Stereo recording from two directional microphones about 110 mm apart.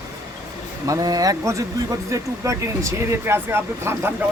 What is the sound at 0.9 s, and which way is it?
Speech, 35° right (ahead or behind).